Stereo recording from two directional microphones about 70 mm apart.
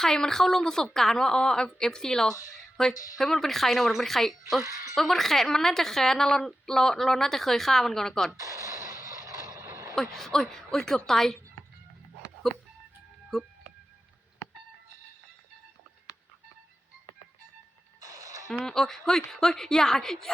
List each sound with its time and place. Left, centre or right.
0.0 s a woman's voice: centre
2.3 s speech: left
3.2 s a woman's voice: centre
4.6 s speech: right
4.9 s a woman's voice: centre
8.4 s a sound: right
9.6 s vehicle: right
9.9 s a woman's voice: centre
13.3 s speech: centre
18.0 s a sound: right
18.6 s a woman's voice: centre